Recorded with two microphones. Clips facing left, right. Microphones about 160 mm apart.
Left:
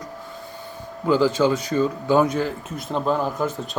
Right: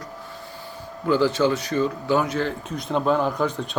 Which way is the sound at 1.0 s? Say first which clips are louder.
Left 1 dB; 15° left (ahead or behind).